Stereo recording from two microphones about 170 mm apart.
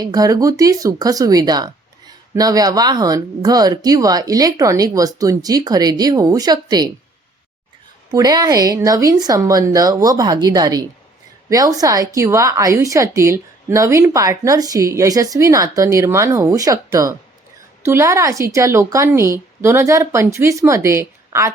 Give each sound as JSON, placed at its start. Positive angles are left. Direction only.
{"t": 0.0, "sound": "speech", "side_deg": -20}
{"t": 8.1, "sound": "a woman's voice", "side_deg": -20}